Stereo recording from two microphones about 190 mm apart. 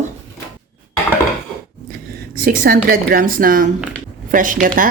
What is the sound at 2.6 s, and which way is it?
A woman's voice, 50° right (ahead or behind).